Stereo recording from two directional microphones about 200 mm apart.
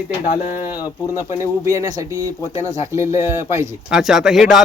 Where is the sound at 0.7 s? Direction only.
20° left (ahead or behind).